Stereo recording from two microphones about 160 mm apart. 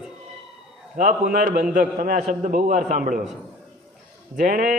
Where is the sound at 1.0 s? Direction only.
60° right (ahead or behind).